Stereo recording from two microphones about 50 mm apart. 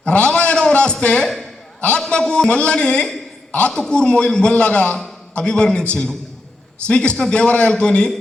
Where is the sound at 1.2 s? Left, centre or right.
Centre.